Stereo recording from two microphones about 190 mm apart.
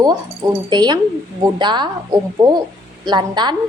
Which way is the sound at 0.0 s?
20° right (ahead or behind).